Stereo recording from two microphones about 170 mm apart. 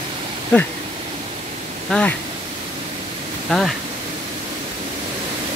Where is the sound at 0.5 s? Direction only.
10° left (ahead or behind).